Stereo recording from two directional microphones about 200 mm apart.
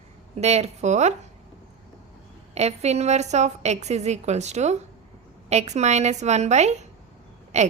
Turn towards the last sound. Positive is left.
turn(degrees=-35)  # may be behind; listen again after turning